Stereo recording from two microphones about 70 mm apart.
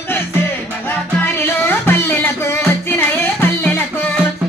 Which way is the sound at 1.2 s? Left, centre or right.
Left.